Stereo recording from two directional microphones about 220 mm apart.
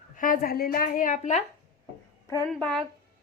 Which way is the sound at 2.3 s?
15° left (ahead or behind).